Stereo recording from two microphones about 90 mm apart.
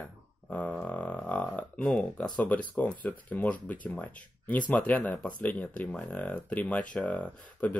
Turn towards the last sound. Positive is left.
turn(degrees=15)  # may be behind; listen again after turning